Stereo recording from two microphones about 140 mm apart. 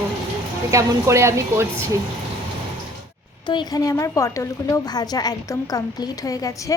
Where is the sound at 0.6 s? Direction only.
20° right (ahead or behind).